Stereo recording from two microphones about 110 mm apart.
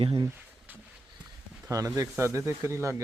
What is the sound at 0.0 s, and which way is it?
Speech, 55° right (ahead or behind).